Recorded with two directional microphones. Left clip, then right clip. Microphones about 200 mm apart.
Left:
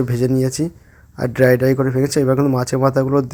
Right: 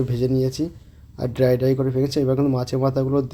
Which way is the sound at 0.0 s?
20° left (ahead or behind).